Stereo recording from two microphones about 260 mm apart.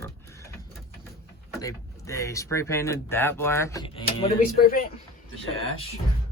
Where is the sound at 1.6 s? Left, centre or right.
Centre.